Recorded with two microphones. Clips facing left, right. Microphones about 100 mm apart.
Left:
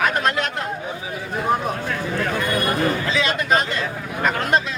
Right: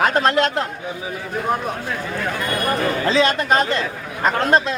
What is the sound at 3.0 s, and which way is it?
Speech, 35° right (ahead or behind).